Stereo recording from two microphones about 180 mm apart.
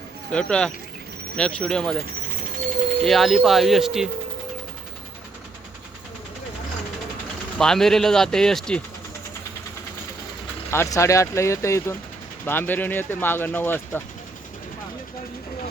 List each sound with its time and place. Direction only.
0.3 s speech: 5° left (ahead or behind)
3.0 s speech: centre (ahead or behind)
7.6 s speech: 5° left (ahead or behind)
10.7 s speech: 15° left (ahead or behind)